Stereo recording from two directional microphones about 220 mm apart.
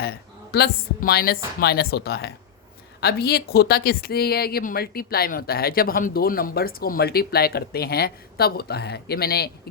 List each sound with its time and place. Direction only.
0.0 s speech: 45° left (ahead or behind)